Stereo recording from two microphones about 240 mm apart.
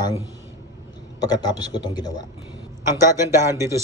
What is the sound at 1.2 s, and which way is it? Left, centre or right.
Speech, centre.